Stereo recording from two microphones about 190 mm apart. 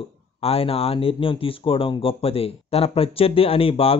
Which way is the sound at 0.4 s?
30° left (ahead or behind).